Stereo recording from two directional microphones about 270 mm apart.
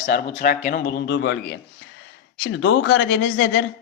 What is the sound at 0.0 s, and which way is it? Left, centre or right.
Speech, left.